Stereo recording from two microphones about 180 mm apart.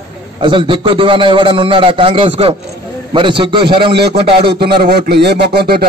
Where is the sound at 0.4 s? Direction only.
25° right (ahead or behind).